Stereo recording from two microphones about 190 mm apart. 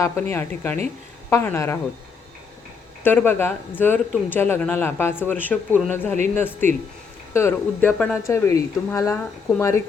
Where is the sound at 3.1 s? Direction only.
10° left (ahead or behind).